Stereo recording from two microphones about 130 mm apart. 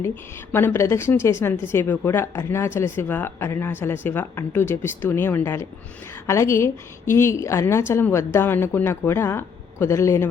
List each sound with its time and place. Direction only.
0.5 s a woman's voice: 15° left (ahead or behind)